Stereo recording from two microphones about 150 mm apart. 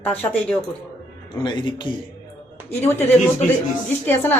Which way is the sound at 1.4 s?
30° left (ahead or behind).